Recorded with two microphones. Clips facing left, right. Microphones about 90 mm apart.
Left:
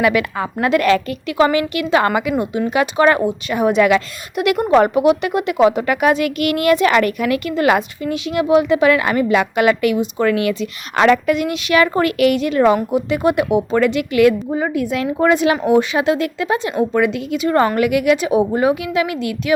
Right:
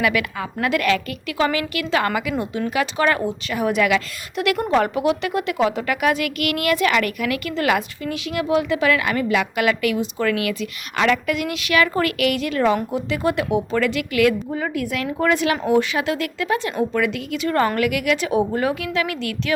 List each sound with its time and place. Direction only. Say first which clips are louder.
0.0 s a woman's voice: left 5 dB; 30° left (ahead or behind)